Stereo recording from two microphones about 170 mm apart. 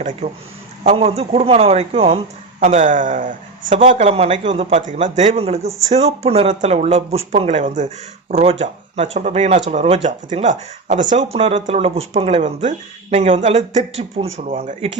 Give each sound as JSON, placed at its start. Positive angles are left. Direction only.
{"t": 0.9, "sound": "speech", "side_deg": -35}
{"t": 2.6, "sound": "speech", "side_deg": -50}
{"t": 3.8, "sound": "speech", "side_deg": -40}
{"t": 10.1, "sound": "speech", "side_deg": -45}